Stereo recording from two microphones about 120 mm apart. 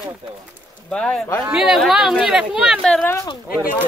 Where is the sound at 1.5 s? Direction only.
5° right (ahead or behind).